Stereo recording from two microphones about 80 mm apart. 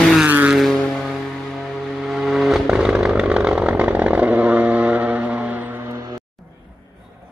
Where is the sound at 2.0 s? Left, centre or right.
Centre.